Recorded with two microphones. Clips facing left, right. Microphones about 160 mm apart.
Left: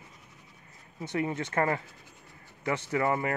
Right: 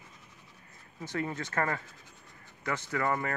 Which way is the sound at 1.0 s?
20° left (ahead or behind).